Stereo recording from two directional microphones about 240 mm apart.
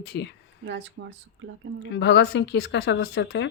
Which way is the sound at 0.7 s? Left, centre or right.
Right.